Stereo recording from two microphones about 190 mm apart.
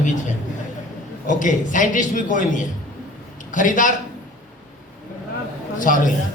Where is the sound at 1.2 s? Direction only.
45° left (ahead or behind).